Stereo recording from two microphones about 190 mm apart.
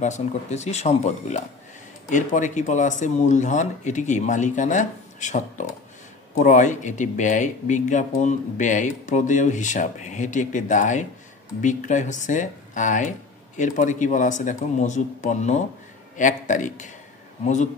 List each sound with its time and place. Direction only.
0.0 s speech: 35° left (ahead or behind)